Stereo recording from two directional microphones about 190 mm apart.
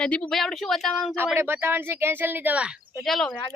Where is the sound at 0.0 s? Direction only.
5° left (ahead or behind).